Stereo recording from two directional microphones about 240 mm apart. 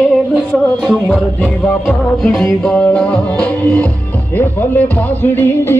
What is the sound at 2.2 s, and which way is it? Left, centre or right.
Music, centre.